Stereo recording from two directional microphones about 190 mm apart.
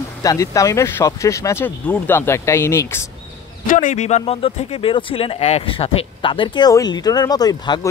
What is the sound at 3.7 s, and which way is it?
Speech, 40° left (ahead or behind).